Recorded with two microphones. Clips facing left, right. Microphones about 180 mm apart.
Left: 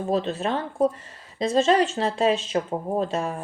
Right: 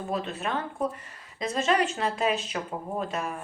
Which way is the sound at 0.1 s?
30° left (ahead or behind).